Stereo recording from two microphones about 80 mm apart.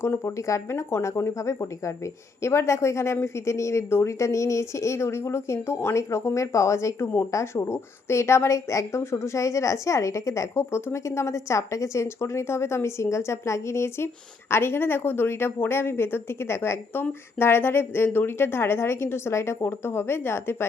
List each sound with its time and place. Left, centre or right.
0.0 s a woman's voice: left